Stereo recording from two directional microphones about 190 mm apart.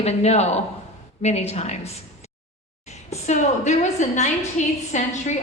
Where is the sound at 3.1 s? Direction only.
40° left (ahead or behind).